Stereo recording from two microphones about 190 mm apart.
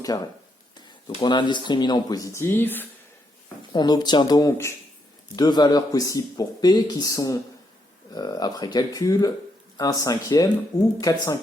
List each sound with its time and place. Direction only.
0.1 s a man's voice: 20° left (ahead or behind)
3.7 s a man's voice: 20° left (ahead or behind)